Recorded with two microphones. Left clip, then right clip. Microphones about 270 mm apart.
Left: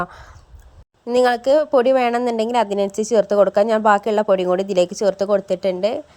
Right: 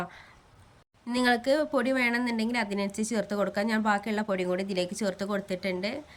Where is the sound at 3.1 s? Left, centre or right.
Left.